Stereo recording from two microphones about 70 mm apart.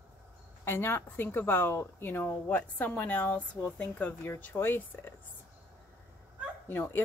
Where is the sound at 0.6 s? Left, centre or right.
Left.